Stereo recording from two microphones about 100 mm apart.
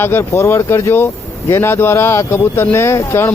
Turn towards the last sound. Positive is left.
turn(degrees=25)  # may be behind; listen again after turning